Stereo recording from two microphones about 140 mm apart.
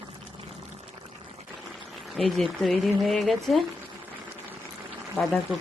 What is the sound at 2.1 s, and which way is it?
Speech, centre (ahead or behind).